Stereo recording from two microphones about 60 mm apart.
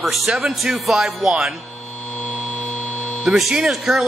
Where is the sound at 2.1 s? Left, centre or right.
Left.